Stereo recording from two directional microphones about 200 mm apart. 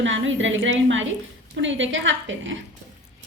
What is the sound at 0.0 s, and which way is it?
A woman's voice, 70° right (ahead or behind).